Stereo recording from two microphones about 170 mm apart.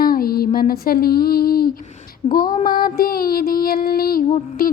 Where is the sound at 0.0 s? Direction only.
60° left (ahead or behind).